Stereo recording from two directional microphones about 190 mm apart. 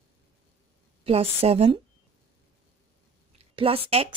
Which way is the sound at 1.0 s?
30° right (ahead or behind).